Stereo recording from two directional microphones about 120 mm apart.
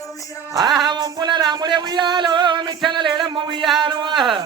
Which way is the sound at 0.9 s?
35° right (ahead or behind).